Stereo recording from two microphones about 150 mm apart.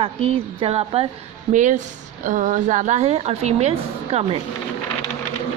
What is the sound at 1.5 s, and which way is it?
A woman's voice, 55° right (ahead or behind).